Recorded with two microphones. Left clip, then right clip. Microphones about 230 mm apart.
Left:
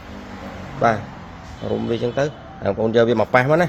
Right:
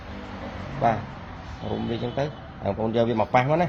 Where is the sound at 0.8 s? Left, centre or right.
Left.